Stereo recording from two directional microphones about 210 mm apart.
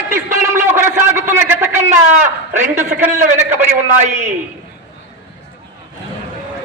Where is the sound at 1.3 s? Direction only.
10° right (ahead or behind).